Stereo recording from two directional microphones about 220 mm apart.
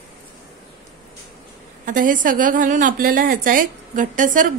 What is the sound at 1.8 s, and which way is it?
A woman's voice, 35° right (ahead or behind).